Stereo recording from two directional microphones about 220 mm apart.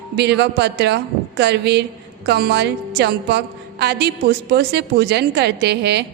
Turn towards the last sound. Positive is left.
turn(degrees=-50)  # may be behind; listen again after turning